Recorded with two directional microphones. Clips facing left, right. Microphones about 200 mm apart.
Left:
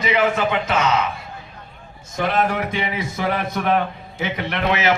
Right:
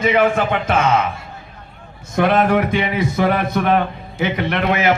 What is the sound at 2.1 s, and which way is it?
A man's voice, 60° right (ahead or behind).